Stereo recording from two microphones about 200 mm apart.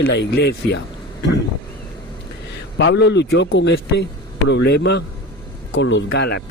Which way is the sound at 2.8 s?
60° left (ahead or behind).